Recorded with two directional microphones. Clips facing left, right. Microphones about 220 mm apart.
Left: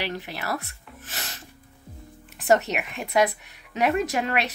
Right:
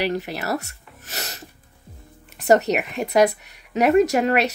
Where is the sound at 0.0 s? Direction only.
40° right (ahead or behind).